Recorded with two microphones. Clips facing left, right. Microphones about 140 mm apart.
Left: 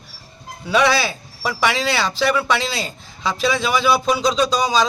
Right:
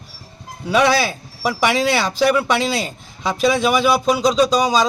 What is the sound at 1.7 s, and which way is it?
A man's voice, 50° right (ahead or behind).